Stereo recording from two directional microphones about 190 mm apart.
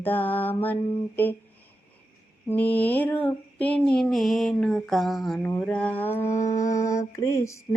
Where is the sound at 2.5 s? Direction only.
10° left (ahead or behind).